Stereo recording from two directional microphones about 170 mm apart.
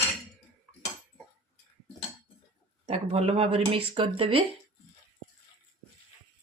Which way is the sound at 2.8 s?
35° right (ahead or behind).